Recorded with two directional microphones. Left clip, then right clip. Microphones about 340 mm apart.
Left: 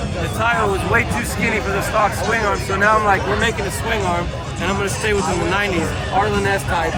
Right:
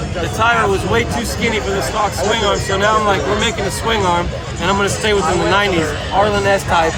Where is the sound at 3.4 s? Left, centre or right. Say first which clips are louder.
Right 3 dB; centre.